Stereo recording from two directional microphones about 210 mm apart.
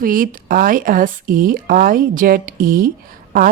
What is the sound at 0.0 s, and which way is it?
Speech, 40° right (ahead or behind).